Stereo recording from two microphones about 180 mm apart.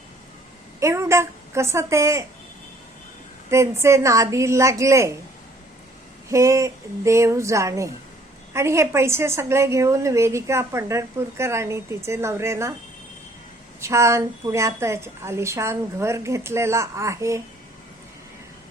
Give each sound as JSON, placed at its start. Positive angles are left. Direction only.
{"t": 0.8, "sound": "a woman's voice", "side_deg": -15}
{"t": 3.5, "sound": "a woman's voice", "side_deg": -15}
{"t": 6.3, "sound": "a woman's voice", "side_deg": -15}
{"t": 13.8, "sound": "a woman's voice", "side_deg": -15}